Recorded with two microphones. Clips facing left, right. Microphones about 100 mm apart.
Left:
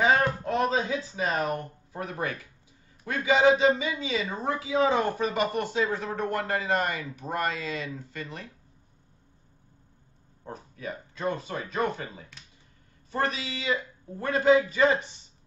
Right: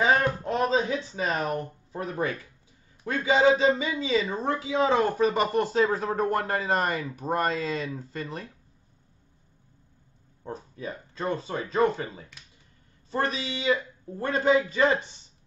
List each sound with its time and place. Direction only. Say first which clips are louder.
0.5 s a sound: right 3 dB; 25° right (ahead or behind)
1.9 s speech: right 2 dB; 30° right (ahead or behind)
10.4 s speech: right 2 dB; 30° right (ahead or behind)
13.1 s a man's voice: right 1 dB; 30° right (ahead or behind)